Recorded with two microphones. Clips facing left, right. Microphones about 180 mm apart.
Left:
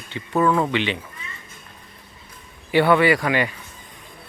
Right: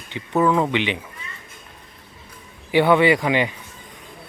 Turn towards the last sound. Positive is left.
turn(degrees=-20)  # may be behind; listen again after turning